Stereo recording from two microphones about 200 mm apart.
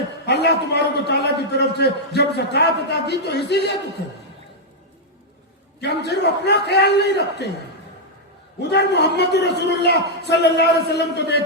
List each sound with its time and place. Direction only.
0.3 s a man's voice: 55° left (ahead or behind)
5.8 s a man's voice: 55° left (ahead or behind)
8.5 s a man's voice: 55° left (ahead or behind)